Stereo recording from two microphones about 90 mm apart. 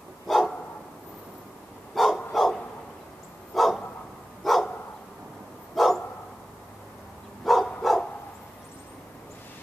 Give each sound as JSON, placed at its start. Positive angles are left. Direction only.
{"t": 0.3, "sound": "dog", "side_deg": 5}
{"t": 2.0, "sound": "dog", "side_deg": 0}
{"t": 2.3, "sound": "a sound", "side_deg": 0}
{"t": 3.5, "sound": "dog", "side_deg": 0}
{"t": 5.8, "sound": "dog", "side_deg": 0}
{"t": 7.4, "sound": "dog", "side_deg": 0}